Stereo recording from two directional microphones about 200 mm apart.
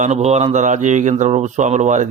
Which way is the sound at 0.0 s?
35° right (ahead or behind).